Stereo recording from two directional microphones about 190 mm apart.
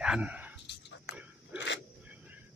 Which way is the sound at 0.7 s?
65° left (ahead or behind).